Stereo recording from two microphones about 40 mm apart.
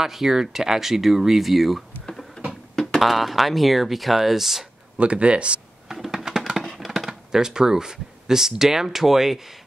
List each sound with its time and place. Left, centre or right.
0.0 s speech: centre
2.0 s a sound: centre
3.0 s speech: centre
4.9 s speech: right
5.9 s computer keyboard: centre
6.6 s a sound: centre
7.1 s speech: centre